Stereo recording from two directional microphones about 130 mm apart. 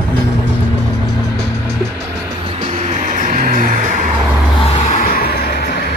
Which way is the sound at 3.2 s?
90° right.